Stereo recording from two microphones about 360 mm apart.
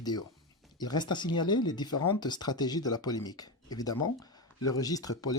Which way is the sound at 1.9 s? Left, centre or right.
Left.